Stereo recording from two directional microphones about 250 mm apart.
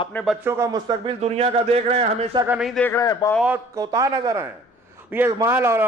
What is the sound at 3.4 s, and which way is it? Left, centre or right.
A man's voice, centre.